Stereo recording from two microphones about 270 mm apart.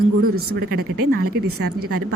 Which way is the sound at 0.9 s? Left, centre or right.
Right.